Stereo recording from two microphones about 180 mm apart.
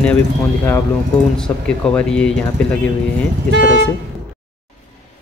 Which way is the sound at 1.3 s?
5° left (ahead or behind).